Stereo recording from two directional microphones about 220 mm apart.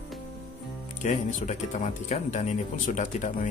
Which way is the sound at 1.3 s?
35° left (ahead or behind).